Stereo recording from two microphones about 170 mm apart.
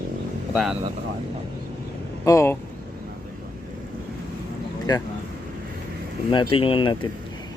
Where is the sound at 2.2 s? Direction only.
20° left (ahead or behind).